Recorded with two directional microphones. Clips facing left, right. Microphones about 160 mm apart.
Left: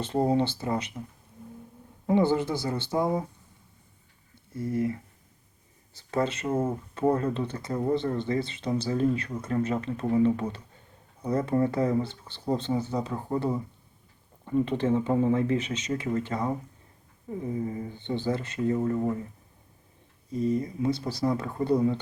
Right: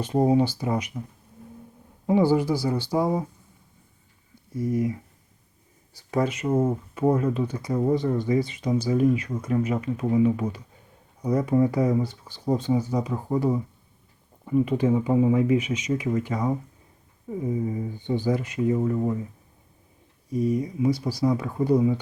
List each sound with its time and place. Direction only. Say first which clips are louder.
0.0 s speech: right 4 dB; 10° right (ahead or behind)
2.0 s speech: right 3 dB; 10° right (ahead or behind)
4.5 s speech: right 3 dB; 15° right (ahead or behind)
6.0 s speech: right 3 dB; 10° right (ahead or behind)
20.3 s speech: right 3 dB; 10° right (ahead or behind)